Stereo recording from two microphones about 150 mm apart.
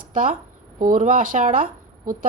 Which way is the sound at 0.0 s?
65° right (ahead or behind).